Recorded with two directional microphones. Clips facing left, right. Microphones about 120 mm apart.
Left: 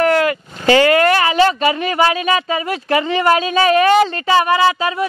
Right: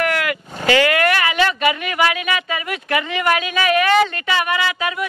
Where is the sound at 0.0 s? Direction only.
30° left (ahead or behind).